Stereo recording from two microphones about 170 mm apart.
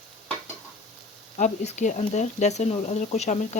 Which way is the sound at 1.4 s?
45° left (ahead or behind).